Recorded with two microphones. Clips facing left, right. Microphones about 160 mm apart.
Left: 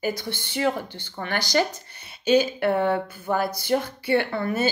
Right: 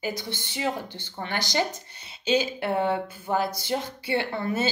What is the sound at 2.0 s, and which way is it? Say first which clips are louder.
Speech: left 5 dB; 55° left (ahead or behind).